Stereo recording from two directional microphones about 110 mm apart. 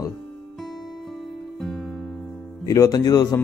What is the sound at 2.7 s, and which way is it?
Speech, 35° left (ahead or behind).